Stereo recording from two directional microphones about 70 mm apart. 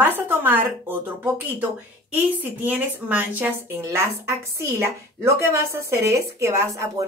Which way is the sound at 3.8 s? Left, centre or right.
Right.